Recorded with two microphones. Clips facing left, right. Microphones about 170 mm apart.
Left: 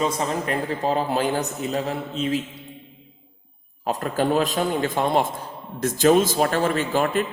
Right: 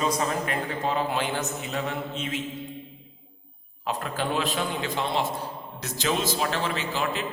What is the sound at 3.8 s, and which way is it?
A man's voice, 40° left (ahead or behind).